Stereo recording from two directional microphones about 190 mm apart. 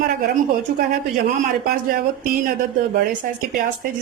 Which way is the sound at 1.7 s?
50° right (ahead or behind).